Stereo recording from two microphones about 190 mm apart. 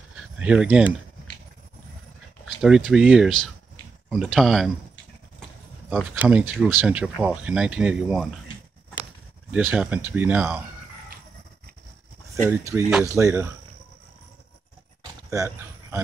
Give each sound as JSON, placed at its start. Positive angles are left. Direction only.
{"t": 0.1, "sound": "a sound", "side_deg": -5}
{"t": 2.4, "sound": "speech", "side_deg": -5}
{"t": 6.2, "sound": "speech", "side_deg": -5}
{"t": 9.5, "sound": "speech", "side_deg": -10}
{"t": 12.4, "sound": "speech", "side_deg": -15}
{"t": 15.2, "sound": "a sound", "side_deg": -15}